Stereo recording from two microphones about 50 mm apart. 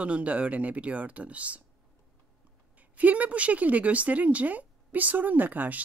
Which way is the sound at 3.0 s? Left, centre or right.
Right.